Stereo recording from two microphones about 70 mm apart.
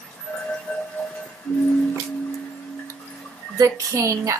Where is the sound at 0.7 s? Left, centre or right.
Centre.